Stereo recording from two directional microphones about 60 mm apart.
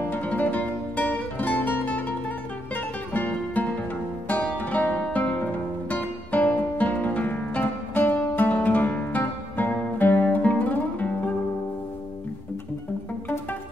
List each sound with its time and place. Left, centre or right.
0.1 s music: left